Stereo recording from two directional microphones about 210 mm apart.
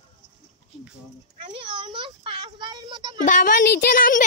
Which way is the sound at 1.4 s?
25° right (ahead or behind).